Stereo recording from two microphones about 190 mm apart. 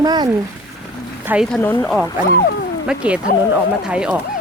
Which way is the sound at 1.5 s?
10° left (ahead or behind).